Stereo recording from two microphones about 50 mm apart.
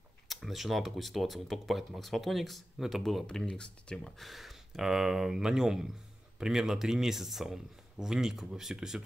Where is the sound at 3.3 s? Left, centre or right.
Centre.